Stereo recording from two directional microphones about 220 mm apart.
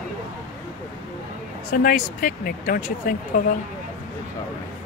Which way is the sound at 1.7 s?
35° left (ahead or behind).